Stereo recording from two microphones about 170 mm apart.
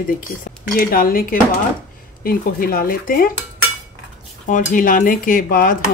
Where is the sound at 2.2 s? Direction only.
60° left (ahead or behind).